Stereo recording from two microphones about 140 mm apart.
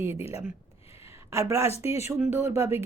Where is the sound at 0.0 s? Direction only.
15° right (ahead or behind).